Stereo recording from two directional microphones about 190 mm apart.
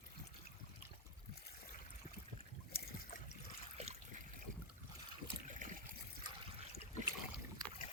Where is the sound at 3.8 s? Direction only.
35° right (ahead or behind).